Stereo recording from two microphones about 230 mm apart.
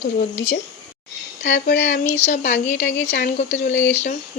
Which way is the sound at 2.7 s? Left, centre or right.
Left.